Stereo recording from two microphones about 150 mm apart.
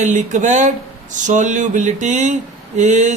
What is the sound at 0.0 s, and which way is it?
Speech, 55° right (ahead or behind).